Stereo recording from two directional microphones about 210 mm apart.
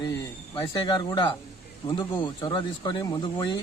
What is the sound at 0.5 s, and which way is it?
Speech, 20° left (ahead or behind).